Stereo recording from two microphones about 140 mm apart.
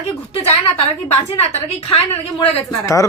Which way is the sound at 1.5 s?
55° left (ahead or behind).